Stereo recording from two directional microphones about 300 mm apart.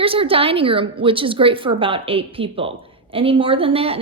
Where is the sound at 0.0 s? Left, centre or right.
Centre.